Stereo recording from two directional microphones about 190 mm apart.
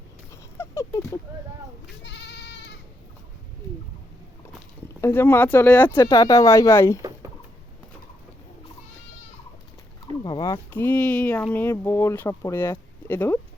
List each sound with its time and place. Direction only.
0.3 s a sound: 15° left (ahead or behind)
2.0 s goat: 65° left (ahead or behind)
4.9 s speech: 10° left (ahead or behind)
10.2 s speech: 20° left (ahead or behind)